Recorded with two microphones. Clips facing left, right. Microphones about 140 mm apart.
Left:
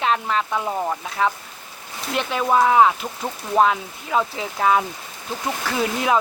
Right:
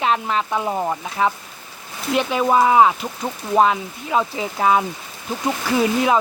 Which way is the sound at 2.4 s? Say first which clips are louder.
Right 1 dB; 5° right (ahead or behind).